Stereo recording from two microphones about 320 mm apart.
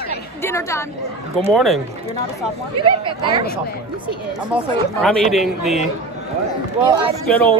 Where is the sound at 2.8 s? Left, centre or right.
Centre.